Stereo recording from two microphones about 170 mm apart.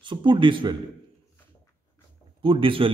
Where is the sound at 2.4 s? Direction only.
30° right (ahead or behind).